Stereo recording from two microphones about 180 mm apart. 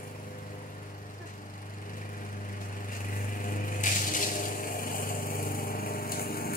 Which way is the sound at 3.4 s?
50° left (ahead or behind).